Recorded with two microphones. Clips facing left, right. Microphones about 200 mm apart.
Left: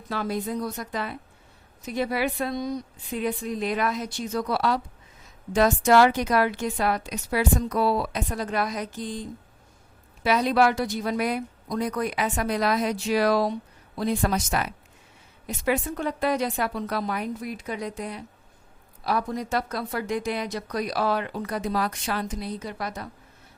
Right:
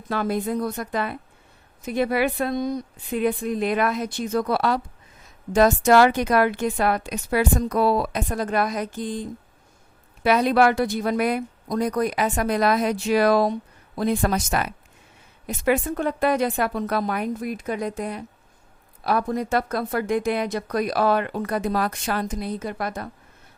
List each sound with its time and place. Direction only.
0.1 s speech: 55° right (ahead or behind)
10.2 s speech: 55° right (ahead or behind)